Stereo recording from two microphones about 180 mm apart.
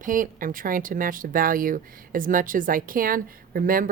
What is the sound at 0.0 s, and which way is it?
Speech, 50° right (ahead or behind).